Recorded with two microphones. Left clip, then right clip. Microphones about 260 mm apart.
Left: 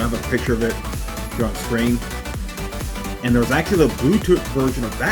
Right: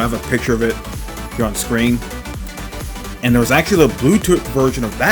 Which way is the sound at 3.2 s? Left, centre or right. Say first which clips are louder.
Right 5 dB; right.